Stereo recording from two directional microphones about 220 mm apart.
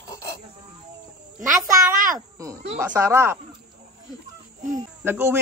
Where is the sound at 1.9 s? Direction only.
40° right (ahead or behind).